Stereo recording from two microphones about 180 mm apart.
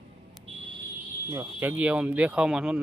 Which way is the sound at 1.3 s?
15° right (ahead or behind).